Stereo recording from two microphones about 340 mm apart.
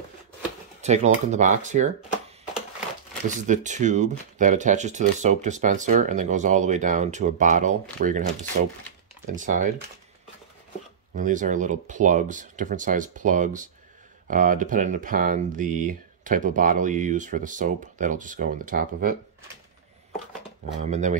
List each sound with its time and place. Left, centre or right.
0.7 s speech: centre
3.3 s speech: right
9.3 s speech: right
11.1 s speech: right
20.8 s speech: centre